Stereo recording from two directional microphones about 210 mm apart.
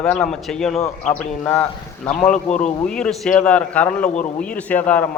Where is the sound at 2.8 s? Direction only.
5° left (ahead or behind).